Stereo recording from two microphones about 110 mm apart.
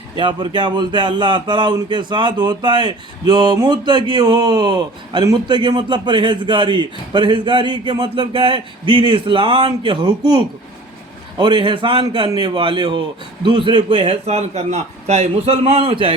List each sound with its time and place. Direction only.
0.2 s a man's voice: 45° right (ahead or behind)